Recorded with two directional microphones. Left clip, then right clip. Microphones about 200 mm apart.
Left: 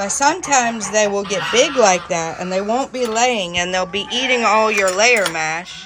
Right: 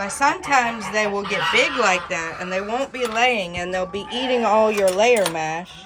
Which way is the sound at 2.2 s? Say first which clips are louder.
Left 4 dB; 15° right (ahead or behind).